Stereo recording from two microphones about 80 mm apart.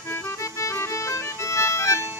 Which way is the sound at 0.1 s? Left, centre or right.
Left.